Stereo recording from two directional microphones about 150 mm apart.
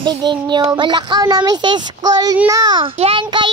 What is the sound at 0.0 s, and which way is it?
A child's voice, 30° right (ahead or behind).